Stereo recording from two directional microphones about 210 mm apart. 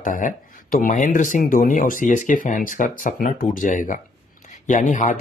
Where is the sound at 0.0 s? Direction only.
40° left (ahead or behind).